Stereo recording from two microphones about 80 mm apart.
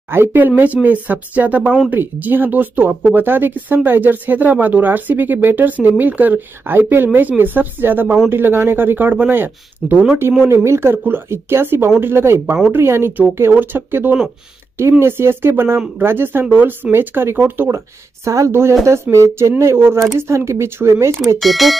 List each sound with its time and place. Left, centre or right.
0.1 s speech: right
10.4 s speech: right
17.7 s speech: right
21.4 s speech: centre